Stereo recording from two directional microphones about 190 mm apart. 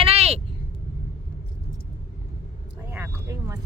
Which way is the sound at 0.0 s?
30° right (ahead or behind).